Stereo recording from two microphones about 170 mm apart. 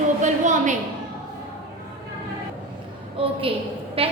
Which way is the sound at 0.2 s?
45° right (ahead or behind).